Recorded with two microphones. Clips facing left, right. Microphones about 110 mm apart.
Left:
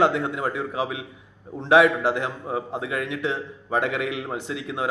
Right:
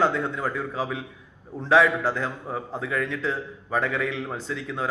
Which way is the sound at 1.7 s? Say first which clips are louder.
Left 3 dB; 60° left (ahead or behind).